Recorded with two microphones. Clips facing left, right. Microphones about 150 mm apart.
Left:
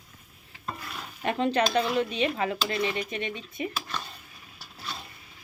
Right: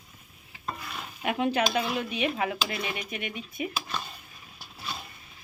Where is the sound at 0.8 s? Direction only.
5° right (ahead or behind).